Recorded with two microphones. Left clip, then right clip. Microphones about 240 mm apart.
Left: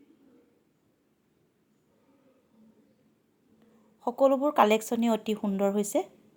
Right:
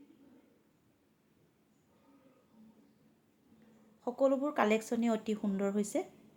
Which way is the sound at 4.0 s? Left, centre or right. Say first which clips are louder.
Left 7 dB; left.